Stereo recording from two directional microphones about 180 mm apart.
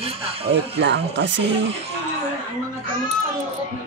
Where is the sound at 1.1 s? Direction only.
90° right.